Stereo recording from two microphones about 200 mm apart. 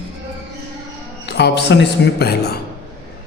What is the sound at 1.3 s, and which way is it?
A woman's voice, 55° left (ahead or behind).